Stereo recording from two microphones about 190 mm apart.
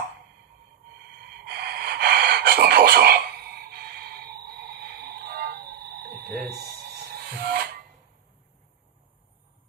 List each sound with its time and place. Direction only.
1.2 s gasp: 55° right (ahead or behind)
3.7 s music: 55° right (ahead or behind)
7.3 s filing: 50° right (ahead or behind)